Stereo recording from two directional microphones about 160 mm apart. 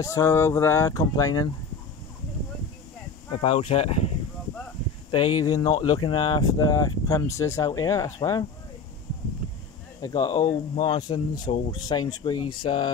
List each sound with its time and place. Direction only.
0.0 s speech: 20° left (ahead or behind)
3.3 s speech: 35° left (ahead or behind)
5.1 s speech: 25° left (ahead or behind)
10.0 s speech: 25° left (ahead or behind)